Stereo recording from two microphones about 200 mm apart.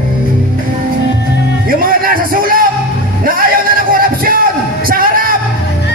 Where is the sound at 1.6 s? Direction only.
45° right (ahead or behind).